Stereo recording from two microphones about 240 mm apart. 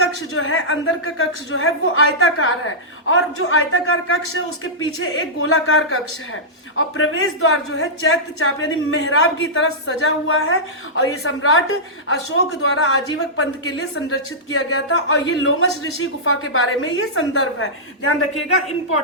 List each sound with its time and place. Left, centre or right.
0.3 s speech: left